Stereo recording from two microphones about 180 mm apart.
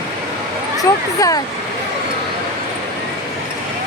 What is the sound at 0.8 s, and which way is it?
Speech, 20° left (ahead or behind).